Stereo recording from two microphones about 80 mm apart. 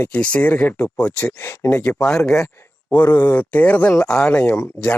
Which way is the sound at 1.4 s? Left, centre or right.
Left.